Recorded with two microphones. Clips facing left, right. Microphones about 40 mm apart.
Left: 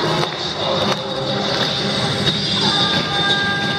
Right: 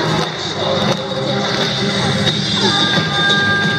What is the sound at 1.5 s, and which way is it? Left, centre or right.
Vehicle, centre.